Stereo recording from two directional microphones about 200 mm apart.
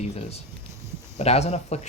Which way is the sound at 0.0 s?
30° left (ahead or behind).